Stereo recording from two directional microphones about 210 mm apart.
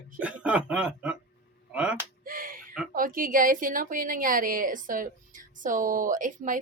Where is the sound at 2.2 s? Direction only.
40° right (ahead or behind).